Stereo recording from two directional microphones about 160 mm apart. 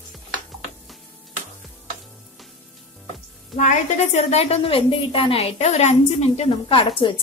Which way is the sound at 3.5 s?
50° left (ahead or behind).